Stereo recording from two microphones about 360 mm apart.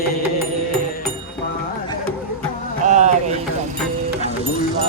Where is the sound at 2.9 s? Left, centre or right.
Centre.